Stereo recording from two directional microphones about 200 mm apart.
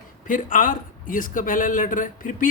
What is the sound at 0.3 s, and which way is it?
A man's voice, 40° left (ahead or behind).